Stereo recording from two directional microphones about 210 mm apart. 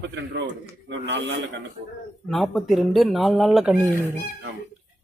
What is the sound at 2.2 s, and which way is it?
Speech, centre (ahead or behind).